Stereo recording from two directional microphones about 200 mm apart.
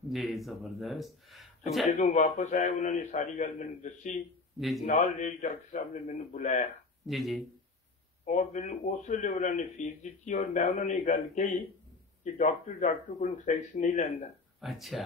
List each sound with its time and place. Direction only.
0.1 s speech: centre (ahead or behind)
1.9 s a man's voice: 35° left (ahead or behind)
4.6 s speech: centre (ahead or behind)
4.8 s a man's voice: 35° left (ahead or behind)
7.1 s speech: centre (ahead or behind)
8.3 s a man's voice: 35° left (ahead or behind)
14.6 s speech: centre (ahead or behind)